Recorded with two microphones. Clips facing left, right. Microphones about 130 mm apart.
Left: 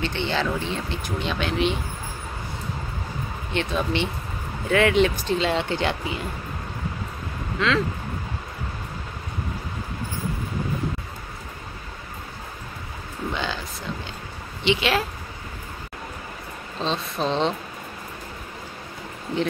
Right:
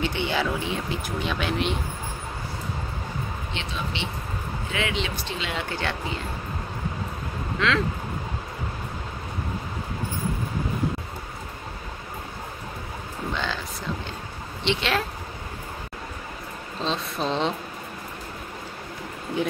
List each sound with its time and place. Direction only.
0.0 s speech: 10° right (ahead or behind)
3.5 s speech: 55° left (ahead or behind); by 6.2 s 15° left (ahead or behind)
7.5 s speech: centre (ahead or behind)
13.3 s a sound: 5° left (ahead or behind)
14.6 s speech: 5° left (ahead or behind)
16.8 s speech: centre (ahead or behind)